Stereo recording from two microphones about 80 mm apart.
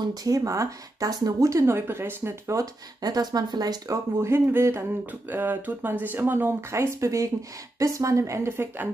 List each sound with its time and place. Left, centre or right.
0.0 s speech: right
2.6 s speech: right
3.9 s speech: right